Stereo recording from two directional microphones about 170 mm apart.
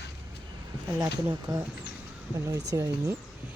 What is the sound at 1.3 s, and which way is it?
Speech, 20° right (ahead or behind).